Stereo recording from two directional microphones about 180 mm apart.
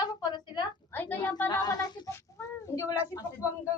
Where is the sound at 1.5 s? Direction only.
20° left (ahead or behind).